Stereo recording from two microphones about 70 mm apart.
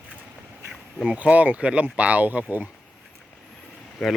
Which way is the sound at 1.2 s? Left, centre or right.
Right.